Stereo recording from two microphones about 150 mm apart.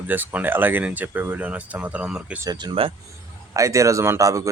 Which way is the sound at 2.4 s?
35° right (ahead or behind).